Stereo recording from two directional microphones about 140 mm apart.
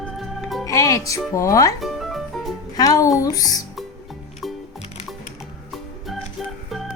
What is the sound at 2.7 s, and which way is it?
Speech, 25° left (ahead or behind).